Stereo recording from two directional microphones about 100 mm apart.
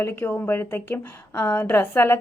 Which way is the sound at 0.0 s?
20° left (ahead or behind).